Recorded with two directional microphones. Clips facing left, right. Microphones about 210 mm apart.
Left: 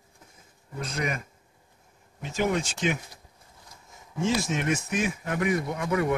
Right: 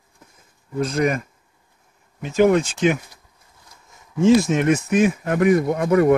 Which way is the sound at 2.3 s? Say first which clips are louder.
Right 11 dB; 60° right (ahead or behind).